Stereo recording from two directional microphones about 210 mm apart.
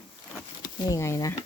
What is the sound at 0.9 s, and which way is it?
Speech, 15° left (ahead or behind).